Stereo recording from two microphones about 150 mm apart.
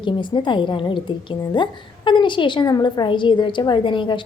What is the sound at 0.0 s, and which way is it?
A woman's voice, 30° left (ahead or behind).